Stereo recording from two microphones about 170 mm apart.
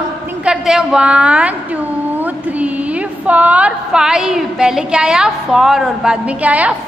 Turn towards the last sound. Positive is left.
turn(degrees=-10)  # may be behind; listen again after turning